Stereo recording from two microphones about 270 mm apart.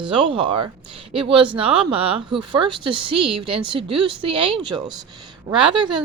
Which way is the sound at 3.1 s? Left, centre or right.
Right.